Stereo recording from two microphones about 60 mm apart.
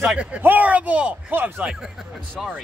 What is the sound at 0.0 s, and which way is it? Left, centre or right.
A man's voice, centre.